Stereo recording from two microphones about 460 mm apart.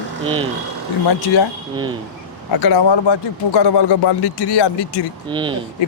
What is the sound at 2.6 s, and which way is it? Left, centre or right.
Speech, left.